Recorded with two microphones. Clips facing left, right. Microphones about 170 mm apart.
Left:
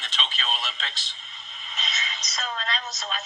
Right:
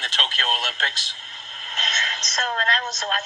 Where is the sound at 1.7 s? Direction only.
45° right (ahead or behind).